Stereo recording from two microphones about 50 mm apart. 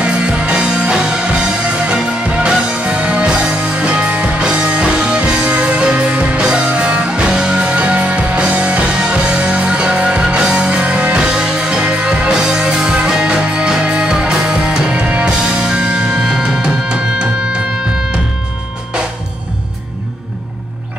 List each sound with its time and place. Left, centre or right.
0.0 s music: right